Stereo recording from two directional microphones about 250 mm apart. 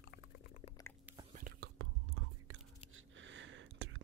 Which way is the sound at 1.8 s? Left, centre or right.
Right.